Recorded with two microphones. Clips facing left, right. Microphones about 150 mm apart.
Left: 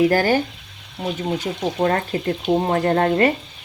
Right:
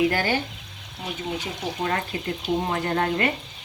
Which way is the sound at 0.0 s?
40° left (ahead or behind).